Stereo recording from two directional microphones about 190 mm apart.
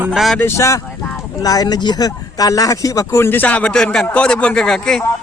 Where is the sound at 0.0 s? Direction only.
Centre (ahead or behind).